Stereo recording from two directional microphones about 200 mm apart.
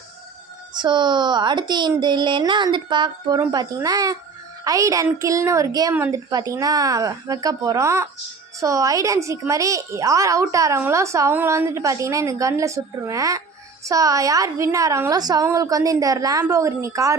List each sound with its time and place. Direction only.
0.7 s a woman's voice: 20° right (ahead or behind)